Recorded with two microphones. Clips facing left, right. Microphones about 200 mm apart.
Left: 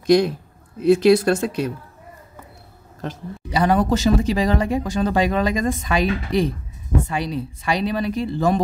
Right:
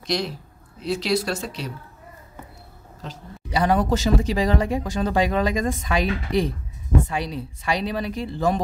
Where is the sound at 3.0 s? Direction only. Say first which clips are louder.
Left 7 dB; 55° left (ahead or behind).